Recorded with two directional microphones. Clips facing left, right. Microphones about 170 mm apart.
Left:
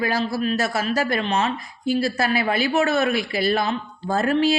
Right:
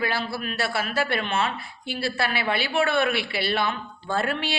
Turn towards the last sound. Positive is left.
turn(degrees=40)  # may be behind; listen again after turning